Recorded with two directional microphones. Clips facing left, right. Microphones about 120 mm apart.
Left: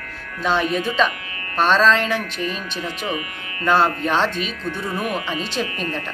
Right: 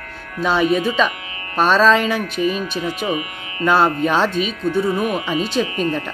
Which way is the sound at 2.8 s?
20° right (ahead or behind).